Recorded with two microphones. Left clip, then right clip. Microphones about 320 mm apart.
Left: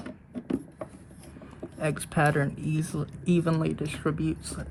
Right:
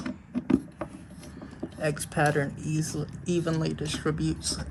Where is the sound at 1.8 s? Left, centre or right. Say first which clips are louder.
Even; left.